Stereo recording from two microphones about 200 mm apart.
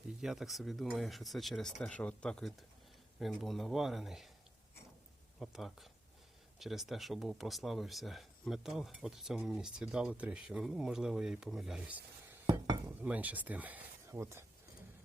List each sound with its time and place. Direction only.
0.2 s speech: centre (ahead or behind)
5.4 s speech: centre (ahead or behind)
12.5 s dishes: 20° right (ahead or behind)
13.0 s speech: 5° right (ahead or behind)